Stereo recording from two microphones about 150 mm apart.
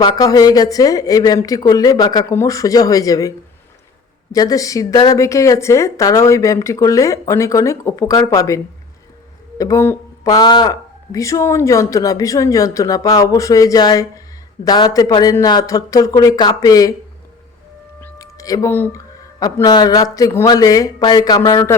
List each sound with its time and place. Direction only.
0.0 s speech: 25° left (ahead or behind)
18.0 s music: 20° left (ahead or behind)
19.4 s speech: 25° left (ahead or behind)